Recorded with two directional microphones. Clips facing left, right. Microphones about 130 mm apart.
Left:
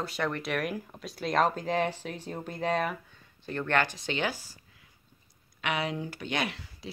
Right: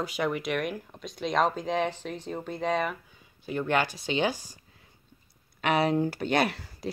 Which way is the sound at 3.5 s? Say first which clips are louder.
Right 2 dB; 10° right (ahead or behind).